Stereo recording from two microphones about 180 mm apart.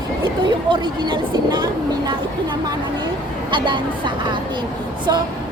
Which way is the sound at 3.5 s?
25° right (ahead or behind).